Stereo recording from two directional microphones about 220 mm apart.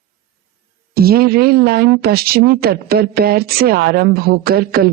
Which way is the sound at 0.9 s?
45° right (ahead or behind).